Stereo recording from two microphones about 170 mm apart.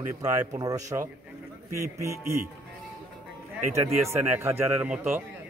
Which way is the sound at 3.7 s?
15° right (ahead or behind).